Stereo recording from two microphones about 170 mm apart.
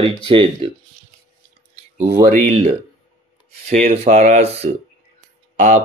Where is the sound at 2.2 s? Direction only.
35° right (ahead or behind).